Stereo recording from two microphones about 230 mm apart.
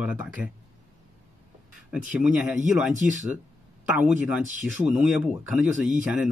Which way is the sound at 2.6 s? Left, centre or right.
Right.